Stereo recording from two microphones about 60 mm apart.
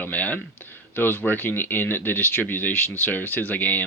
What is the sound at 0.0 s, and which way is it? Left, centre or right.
Speech, left.